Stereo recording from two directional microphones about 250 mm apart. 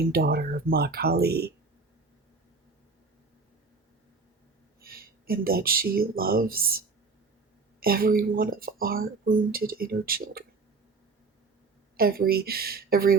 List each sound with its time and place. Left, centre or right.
0.1 s speech: right
4.8 s speech: right
11.9 s speech: right